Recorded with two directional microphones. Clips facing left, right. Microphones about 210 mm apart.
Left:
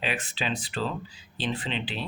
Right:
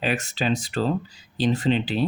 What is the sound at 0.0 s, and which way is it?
Speech, 45° right (ahead or behind).